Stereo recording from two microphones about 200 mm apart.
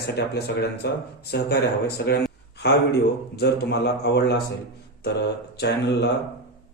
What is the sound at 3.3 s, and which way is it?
A man's voice, 55° left (ahead or behind).